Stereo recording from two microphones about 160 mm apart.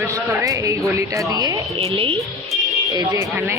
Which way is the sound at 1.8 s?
35° right (ahead or behind).